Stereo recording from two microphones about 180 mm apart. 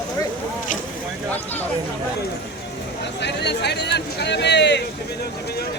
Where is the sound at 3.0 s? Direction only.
70° left (ahead or behind).